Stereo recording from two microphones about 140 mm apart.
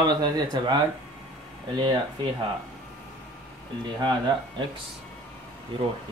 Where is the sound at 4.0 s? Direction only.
30° right (ahead or behind).